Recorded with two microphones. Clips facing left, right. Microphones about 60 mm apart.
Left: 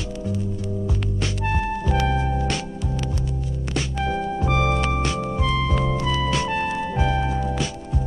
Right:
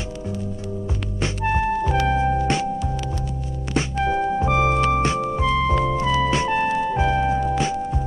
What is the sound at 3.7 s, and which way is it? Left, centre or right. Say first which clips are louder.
Music: right 4 dB; right.